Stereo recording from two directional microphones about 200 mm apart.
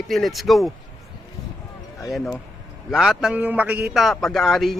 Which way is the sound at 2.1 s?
5° left (ahead or behind).